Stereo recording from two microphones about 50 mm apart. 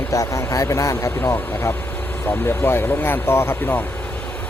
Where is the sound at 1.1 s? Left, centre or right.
Left.